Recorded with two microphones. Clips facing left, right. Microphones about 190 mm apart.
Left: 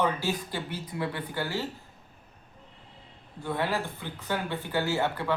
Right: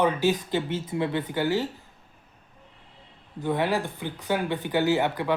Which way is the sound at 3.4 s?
15° right (ahead or behind).